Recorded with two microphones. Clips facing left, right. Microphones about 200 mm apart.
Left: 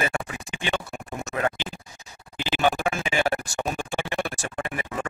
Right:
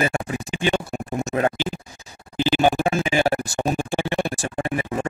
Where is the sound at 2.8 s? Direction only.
30° right (ahead or behind).